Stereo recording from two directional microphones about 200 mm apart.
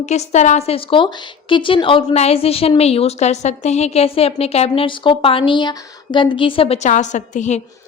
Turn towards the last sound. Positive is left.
turn(degrees=35)  # may be behind; listen again after turning